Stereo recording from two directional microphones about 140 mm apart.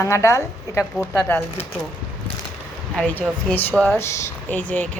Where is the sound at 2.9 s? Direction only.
10° left (ahead or behind).